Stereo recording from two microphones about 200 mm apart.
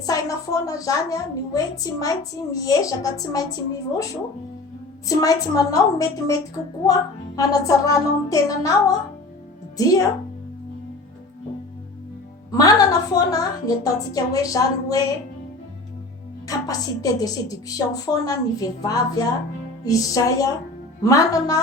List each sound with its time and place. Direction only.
0.0 s a woman's voice: 15° left (ahead or behind)
5.0 s a woman's voice: 15° left (ahead or behind)
12.5 s a woman's voice: 20° left (ahead or behind)
16.5 s a woman's voice: 20° left (ahead or behind)